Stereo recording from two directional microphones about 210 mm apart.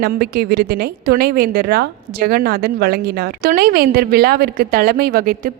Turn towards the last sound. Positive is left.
turn(degrees=-45)  # may be behind; listen again after turning